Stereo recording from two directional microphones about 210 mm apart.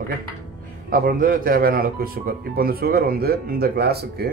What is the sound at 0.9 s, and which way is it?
Speech, 40° right (ahead or behind).